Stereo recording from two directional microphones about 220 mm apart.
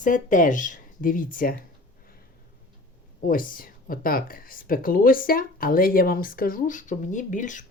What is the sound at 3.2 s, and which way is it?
Speech, 40° left (ahead or behind).